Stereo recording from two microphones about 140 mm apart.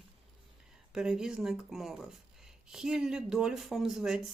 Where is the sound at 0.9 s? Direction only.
5° right (ahead or behind).